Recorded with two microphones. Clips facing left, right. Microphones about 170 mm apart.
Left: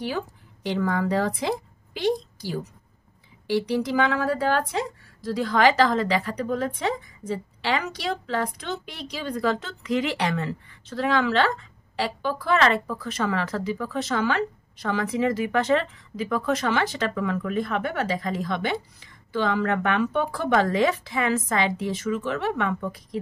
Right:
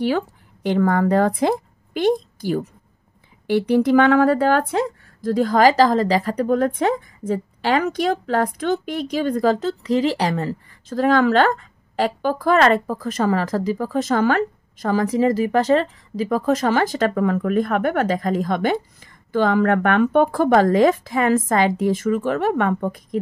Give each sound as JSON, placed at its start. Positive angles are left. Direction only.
{"t": 0.7, "sound": "a woman's voice", "side_deg": -55}